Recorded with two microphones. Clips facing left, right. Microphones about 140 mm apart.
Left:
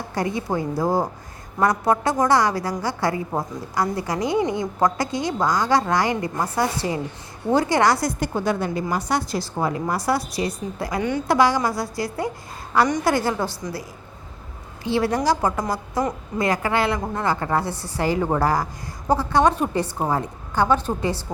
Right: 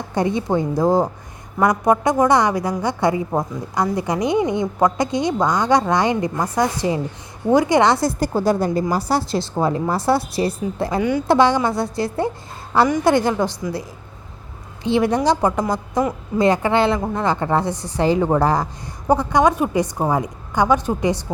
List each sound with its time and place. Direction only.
0.1 s a woman's voice: 25° right (ahead or behind)
8.2 s a woman's voice: 35° right (ahead or behind); by 13.8 s 20° right (ahead or behind)
14.8 s a woman's voice: 20° right (ahead or behind)